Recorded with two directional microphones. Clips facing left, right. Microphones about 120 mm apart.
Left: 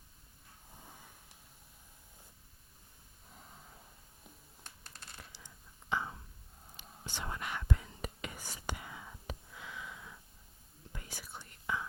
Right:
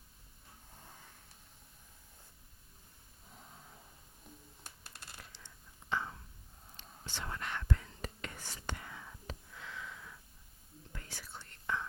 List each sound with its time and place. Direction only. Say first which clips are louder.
0.8 s vehicle: left 2 dB; 10° left (ahead or behind)
3.2 s a sound: even; centre (ahead or behind)
5.9 s whispering: left 1 dB; 15° left (ahead or behind)